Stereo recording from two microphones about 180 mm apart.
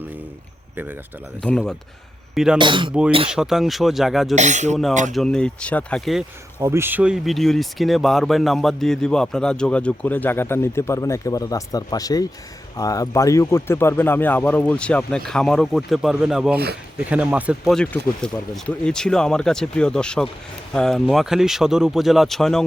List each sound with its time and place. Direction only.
1.4 s speech: 5° left (ahead or behind)
2.6 s speech: 25° right (ahead or behind)
3.2 s speech: 5° right (ahead or behind)
4.4 s speech: 40° right (ahead or behind)
5.1 s speech: 5° left (ahead or behind)
6.6 s speech: 15° right (ahead or behind); by 22.6 s centre (ahead or behind)